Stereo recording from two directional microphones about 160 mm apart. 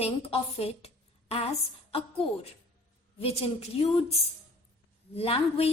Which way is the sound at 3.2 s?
40° left (ahead or behind).